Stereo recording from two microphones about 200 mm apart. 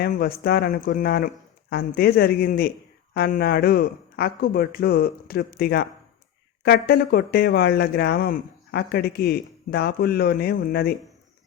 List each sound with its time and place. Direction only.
0.0 s speech: 50° left (ahead or behind)